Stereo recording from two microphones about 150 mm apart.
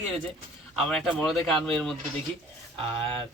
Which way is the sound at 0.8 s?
5° left (ahead or behind).